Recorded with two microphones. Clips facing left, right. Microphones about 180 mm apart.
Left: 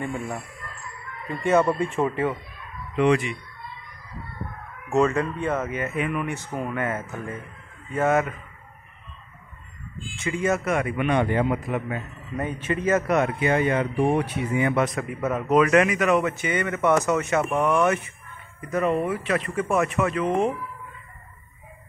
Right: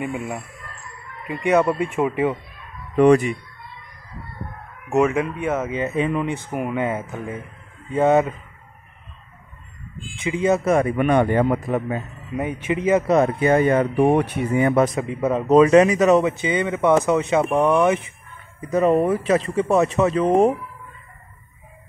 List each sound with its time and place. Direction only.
0.0 s speech: 15° right (ahead or behind)
1.4 s speech: 5° right (ahead or behind)
3.0 s speech: 45° right (ahead or behind)
4.8 s speech: 20° right (ahead or behind)
5.7 s speech: 20° right (ahead or behind)
10.2 s speech: 15° right (ahead or behind)
10.6 s speech: 35° right (ahead or behind)
12.4 s speech: 15° right (ahead or behind)
13.0 s speech: 30° right (ahead or behind)
13.9 s speech: 60° right (ahead or behind)
14.6 s speech: 40° right (ahead or behind)
15.0 s speech: 25° right (ahead or behind)
16.3 s speech: 15° right (ahead or behind)
18.9 s speech: 40° right (ahead or behind)